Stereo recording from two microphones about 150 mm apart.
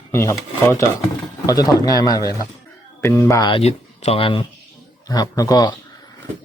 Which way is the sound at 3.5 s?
45° left (ahead or behind).